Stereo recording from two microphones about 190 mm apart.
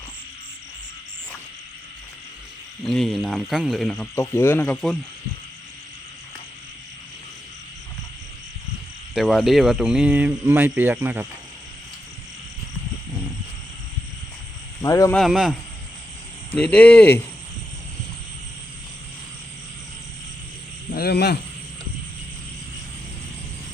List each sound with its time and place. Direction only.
2.8 s speech: centre (ahead or behind)
4.1 s speech: 15° left (ahead or behind)
9.1 s speech: centre (ahead or behind)
14.8 s speech: 15° left (ahead or behind)
15.1 s speech: centre (ahead or behind)
16.6 s speech: 5° left (ahead or behind)
20.9 s a sound: 55° left (ahead or behind)